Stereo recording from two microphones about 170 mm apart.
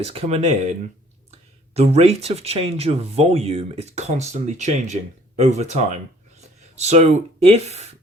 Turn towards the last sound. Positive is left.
turn(degrees=-40)  # may be behind; listen again after turning